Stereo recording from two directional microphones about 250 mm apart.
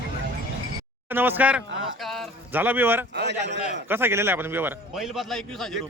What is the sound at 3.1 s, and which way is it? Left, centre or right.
Speech, right.